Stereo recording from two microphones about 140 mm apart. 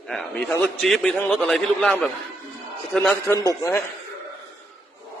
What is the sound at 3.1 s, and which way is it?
Speech, 20° left (ahead or behind).